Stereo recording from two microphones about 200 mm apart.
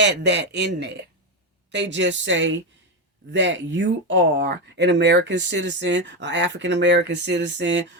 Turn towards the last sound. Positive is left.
turn(degrees=-65)  # may be behind; listen again after turning